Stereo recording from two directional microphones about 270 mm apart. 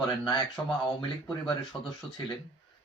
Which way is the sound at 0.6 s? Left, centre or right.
Centre.